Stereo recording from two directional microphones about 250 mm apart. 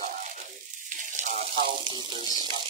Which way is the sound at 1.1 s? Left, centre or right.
Right.